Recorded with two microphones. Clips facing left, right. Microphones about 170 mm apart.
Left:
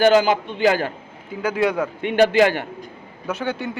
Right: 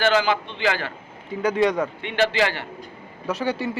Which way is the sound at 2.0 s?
45° left (ahead or behind).